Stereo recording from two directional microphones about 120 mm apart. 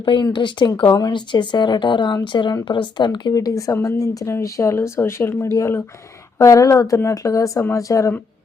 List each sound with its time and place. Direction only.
0.0 s a woman's voice: 45° left (ahead or behind); by 8.1 s 25° left (ahead or behind)